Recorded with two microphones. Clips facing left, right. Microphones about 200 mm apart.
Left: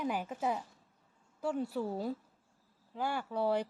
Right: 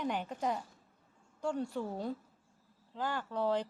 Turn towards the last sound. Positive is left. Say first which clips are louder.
# left 1 dB
turn(degrees=10)  # may be behind; listen again after turning